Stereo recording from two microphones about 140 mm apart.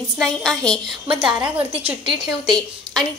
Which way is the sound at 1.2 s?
10° right (ahead or behind).